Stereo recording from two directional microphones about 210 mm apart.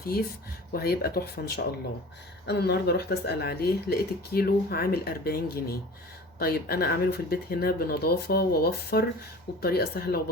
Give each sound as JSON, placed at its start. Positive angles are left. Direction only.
{"t": 0.7, "sound": "speech", "side_deg": 45}